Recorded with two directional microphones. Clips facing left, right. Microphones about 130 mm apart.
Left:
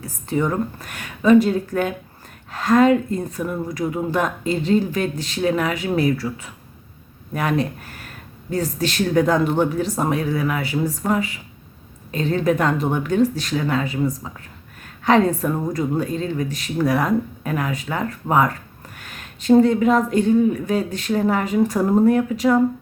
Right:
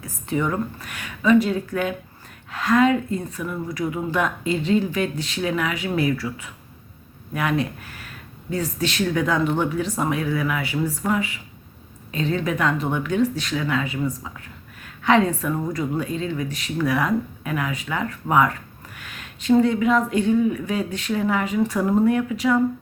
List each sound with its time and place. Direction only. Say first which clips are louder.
0.0 s speech: left 2 dB; 35° left (ahead or behind)